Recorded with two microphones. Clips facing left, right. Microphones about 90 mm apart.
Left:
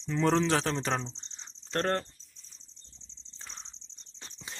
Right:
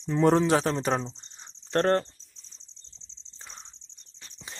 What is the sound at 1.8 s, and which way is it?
Speech, 35° right (ahead or behind).